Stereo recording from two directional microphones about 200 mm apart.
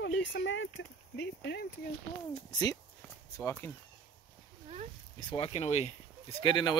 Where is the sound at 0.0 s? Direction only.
65° left (ahead or behind).